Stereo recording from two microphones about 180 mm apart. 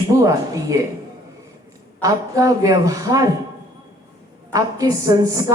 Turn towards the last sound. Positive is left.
turn(degrees=-20)  # may be behind; listen again after turning